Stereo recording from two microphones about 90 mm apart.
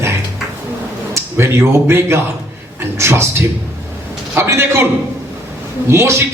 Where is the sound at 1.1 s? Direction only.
30° right (ahead or behind).